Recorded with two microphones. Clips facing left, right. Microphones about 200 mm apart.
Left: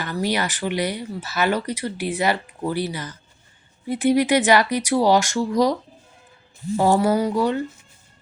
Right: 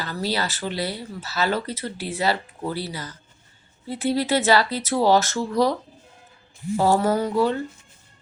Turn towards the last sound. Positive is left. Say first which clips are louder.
# left 1 dB
turn(degrees=15)  # may be behind; listen again after turning